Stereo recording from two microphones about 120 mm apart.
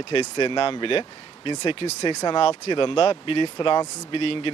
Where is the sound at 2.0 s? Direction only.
40° left (ahead or behind).